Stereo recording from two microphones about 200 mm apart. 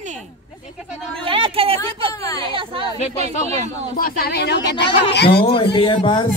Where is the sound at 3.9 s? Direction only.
50° left (ahead or behind).